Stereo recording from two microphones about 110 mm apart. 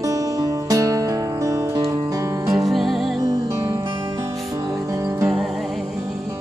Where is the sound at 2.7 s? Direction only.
Centre (ahead or behind).